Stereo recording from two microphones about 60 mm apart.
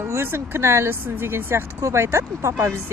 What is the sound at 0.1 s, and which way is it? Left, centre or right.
Speech, right.